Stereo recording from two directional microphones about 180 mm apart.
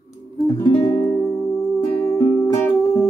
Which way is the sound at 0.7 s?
25° left (ahead or behind).